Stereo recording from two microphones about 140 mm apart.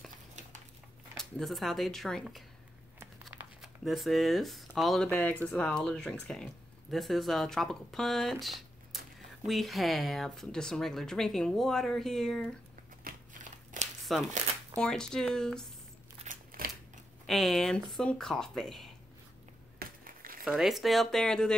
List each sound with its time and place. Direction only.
1.1 s speech: centre (ahead or behind)
3.0 s crumpling: 15° right (ahead or behind)
3.6 s speech: centre (ahead or behind)
13.0 s crumpling: 65° right (ahead or behind)
14.1 s speech: centre (ahead or behind)
16.3 s a sound: 80° right
17.3 s speech: centre (ahead or behind)
19.8 s a sound: 90° right
20.4 s speech: centre (ahead or behind)